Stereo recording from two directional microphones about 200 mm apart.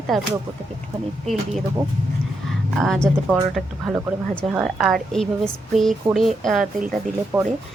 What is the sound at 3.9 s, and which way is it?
Speech, 15° right (ahead or behind).